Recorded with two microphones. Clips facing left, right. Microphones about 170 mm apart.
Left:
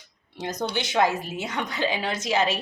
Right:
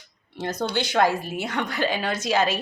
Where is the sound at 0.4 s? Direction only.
15° left (ahead or behind).